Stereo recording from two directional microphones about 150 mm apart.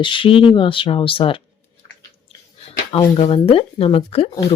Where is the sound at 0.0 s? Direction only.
35° left (ahead or behind).